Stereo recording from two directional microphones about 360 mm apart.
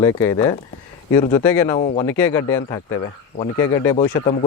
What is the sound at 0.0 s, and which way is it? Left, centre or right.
Speech, centre.